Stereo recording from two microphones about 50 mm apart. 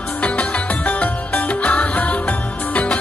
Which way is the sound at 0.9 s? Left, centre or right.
Left.